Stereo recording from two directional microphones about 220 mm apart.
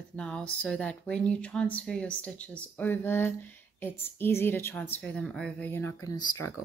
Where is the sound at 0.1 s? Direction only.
5° left (ahead or behind).